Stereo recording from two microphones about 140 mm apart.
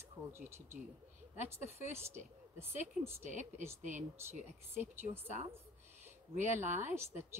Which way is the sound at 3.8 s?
60° right (ahead or behind).